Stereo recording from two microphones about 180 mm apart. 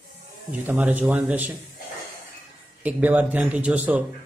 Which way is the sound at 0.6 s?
10° right (ahead or behind).